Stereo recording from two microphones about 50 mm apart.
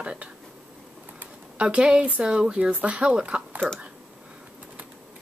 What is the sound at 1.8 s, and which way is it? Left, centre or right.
Speech, centre.